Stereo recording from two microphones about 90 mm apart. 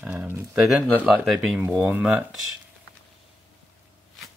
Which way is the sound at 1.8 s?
15° right (ahead or behind).